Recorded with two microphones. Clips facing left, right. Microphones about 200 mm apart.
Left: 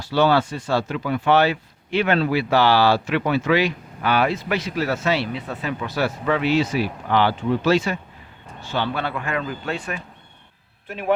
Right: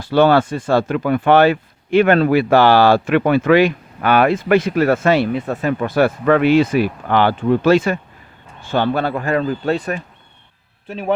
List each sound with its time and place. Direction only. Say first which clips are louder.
0.0 s a man's voice: right 5 dB; 55° right (ahead or behind)